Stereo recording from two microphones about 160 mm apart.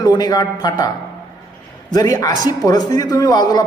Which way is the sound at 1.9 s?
25° left (ahead or behind).